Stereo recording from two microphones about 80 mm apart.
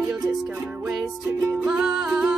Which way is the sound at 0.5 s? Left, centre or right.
Right.